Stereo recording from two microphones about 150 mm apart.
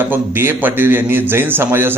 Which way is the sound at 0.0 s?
15° right (ahead or behind).